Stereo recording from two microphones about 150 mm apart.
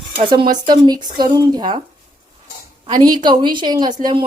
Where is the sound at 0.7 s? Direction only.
30° right (ahead or behind).